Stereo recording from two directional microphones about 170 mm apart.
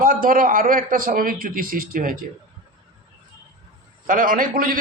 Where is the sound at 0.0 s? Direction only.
55° right (ahead or behind).